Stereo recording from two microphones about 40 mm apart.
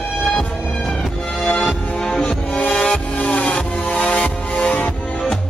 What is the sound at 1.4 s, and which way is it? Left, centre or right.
Music, left.